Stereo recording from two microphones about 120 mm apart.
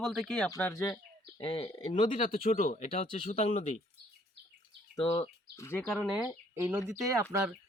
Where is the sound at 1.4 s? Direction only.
50° left (ahead or behind).